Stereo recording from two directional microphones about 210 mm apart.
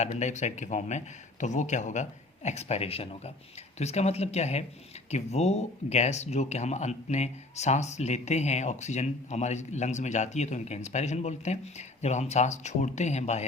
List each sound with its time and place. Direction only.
0.0 s speech: 35° left (ahead or behind)